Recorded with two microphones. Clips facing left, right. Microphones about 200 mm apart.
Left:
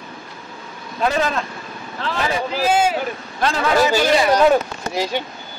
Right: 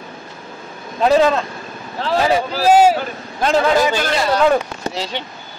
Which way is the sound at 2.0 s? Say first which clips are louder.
Right 6 dB; 35° right (ahead or behind).